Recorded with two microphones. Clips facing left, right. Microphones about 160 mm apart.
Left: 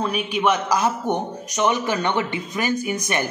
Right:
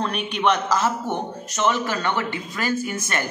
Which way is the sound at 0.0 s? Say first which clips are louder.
Left 1 dB; 5° left (ahead or behind).